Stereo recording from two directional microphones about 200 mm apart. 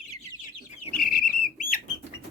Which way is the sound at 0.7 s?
45° left (ahead or behind).